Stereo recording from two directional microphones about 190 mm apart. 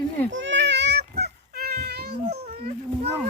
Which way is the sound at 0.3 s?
75° right (ahead or behind).